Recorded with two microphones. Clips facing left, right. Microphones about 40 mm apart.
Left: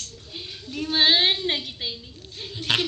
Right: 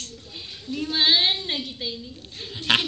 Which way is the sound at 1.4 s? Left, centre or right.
Left.